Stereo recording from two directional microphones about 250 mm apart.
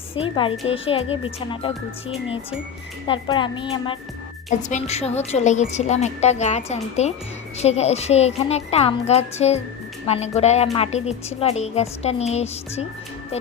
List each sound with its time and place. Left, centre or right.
0.1 s a woman's voice: left